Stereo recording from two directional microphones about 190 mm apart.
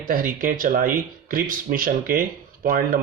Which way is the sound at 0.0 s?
45° right (ahead or behind).